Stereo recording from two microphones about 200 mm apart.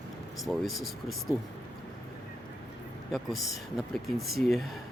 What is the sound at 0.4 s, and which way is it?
Speech, centre (ahead or behind).